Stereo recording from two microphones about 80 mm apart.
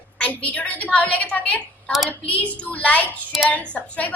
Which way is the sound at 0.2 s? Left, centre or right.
Centre.